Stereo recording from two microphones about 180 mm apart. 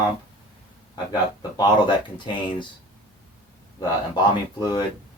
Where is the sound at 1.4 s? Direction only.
25° left (ahead or behind).